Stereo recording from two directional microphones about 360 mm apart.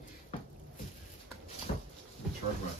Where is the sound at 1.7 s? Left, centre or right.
Centre.